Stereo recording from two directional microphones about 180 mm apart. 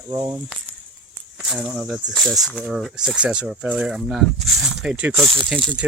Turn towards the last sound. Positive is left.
turn(degrees=0)  # may be behind; listen again after turning